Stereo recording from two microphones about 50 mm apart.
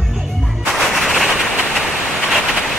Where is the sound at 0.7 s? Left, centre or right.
Centre.